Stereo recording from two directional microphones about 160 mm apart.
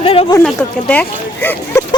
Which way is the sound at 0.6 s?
10° left (ahead or behind).